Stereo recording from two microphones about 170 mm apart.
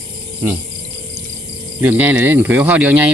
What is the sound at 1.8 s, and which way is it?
Speech, 10° right (ahead or behind).